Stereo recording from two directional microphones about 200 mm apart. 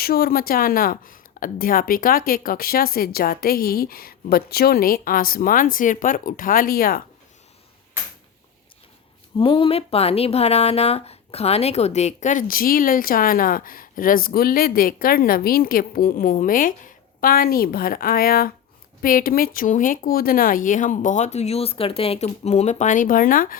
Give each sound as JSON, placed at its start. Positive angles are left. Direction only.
{"t": 0.0, "sound": "speech", "side_deg": 50}
{"t": 9.4, "sound": "speech", "side_deg": 25}